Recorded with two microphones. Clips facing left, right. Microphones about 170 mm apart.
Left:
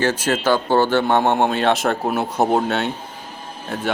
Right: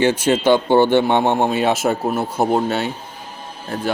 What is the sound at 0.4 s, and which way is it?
Speech, 25° right (ahead or behind).